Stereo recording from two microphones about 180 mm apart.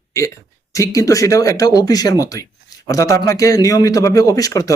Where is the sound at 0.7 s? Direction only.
20° left (ahead or behind).